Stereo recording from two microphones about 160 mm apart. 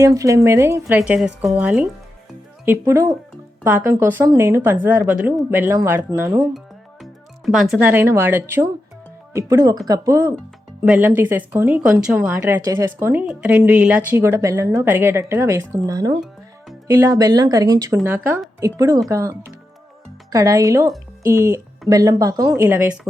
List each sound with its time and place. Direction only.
0.0 s a woman's voice: 20° right (ahead or behind)
7.0 s speech: centre (ahead or behind); by 10.3 s 20° right (ahead or behind)
10.8 s a woman's voice: 10° right (ahead or behind)
12.5 s a woman's voice: 20° right (ahead or behind)